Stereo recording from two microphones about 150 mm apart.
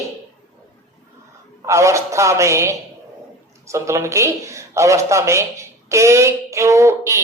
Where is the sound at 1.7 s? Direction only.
20° right (ahead or behind).